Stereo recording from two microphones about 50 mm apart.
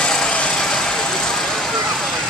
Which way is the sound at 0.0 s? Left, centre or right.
Centre.